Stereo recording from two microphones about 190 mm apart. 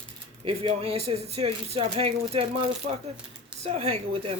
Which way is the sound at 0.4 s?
30° right (ahead or behind).